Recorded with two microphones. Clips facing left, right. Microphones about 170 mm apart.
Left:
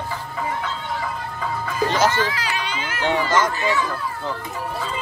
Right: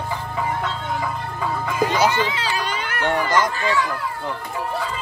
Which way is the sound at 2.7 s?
55° right (ahead or behind).